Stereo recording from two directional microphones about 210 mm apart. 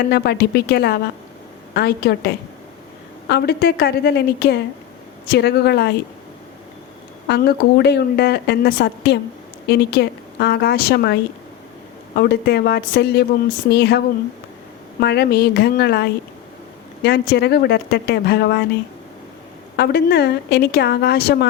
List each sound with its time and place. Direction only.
0.1 s a woman's voice: 50° left (ahead or behind)
7.3 s a woman's voice: 50° left (ahead or behind)
15.0 s a woman's voice: 50° left (ahead or behind)
19.7 s a woman's voice: 50° left (ahead or behind)